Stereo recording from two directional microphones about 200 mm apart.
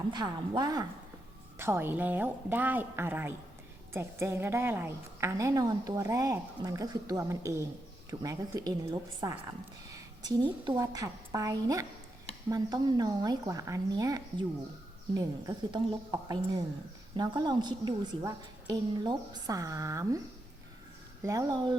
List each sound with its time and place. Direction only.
0.1 s a woman's voice: 20° right (ahead or behind)